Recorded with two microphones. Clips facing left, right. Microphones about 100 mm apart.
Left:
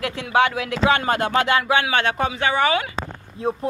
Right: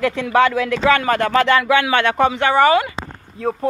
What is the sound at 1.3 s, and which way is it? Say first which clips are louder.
Music: right 5 dB; 55° right (ahead or behind).